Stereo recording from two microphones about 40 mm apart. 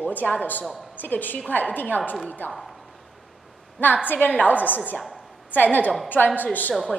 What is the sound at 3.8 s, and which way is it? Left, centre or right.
A woman's voice, left.